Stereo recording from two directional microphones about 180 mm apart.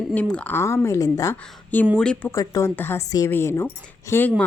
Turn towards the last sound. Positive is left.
turn(degrees=10)  # may be behind; listen again after turning